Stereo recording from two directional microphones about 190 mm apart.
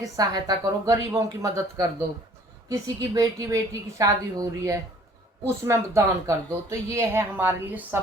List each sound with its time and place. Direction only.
0.0 s speech: 20° right (ahead or behind)